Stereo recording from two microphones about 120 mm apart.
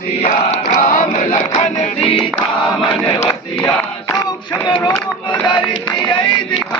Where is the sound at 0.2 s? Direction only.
75° left (ahead or behind); by 1.4 s 90° left.